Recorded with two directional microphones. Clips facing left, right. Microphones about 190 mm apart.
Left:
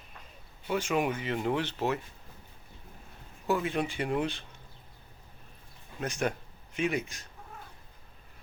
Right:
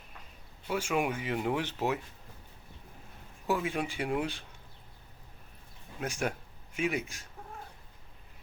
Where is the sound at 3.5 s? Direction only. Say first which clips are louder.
Left 2 dB; 5° right (ahead or behind).